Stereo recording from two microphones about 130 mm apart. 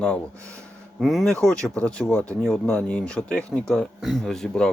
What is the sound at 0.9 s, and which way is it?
Speech, centre (ahead or behind).